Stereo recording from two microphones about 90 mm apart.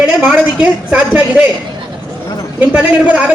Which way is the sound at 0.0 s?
10° right (ahead or behind).